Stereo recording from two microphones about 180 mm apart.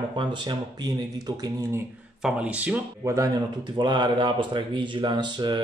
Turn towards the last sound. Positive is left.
turn(degrees=-25)  # may be behind; listen again after turning